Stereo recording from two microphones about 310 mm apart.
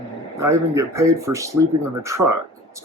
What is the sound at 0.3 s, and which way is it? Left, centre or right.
Speech, centre.